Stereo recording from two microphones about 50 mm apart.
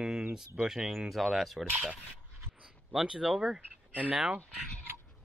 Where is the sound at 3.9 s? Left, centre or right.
Right.